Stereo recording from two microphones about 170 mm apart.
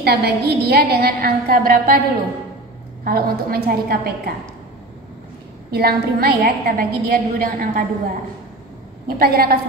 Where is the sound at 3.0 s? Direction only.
60° right (ahead or behind).